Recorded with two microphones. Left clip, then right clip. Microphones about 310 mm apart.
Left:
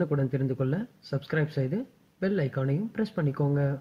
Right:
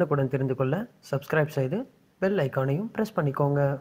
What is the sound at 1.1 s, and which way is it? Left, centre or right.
Speech, right.